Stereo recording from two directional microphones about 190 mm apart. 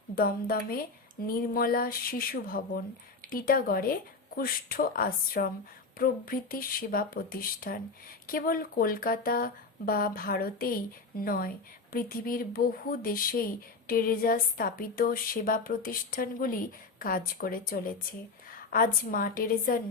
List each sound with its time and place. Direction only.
0.2 s a woman's voice: 50° left (ahead or behind)